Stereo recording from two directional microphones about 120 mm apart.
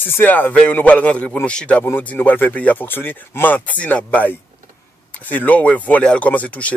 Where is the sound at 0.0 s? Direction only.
15° left (ahead or behind).